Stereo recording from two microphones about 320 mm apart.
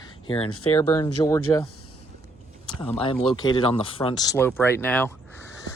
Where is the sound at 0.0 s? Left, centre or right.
Centre.